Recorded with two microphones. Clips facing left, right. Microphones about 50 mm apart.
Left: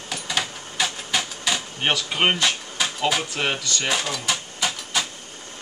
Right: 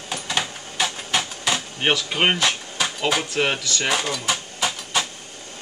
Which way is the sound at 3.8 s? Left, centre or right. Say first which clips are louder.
Right 2 dB; centre.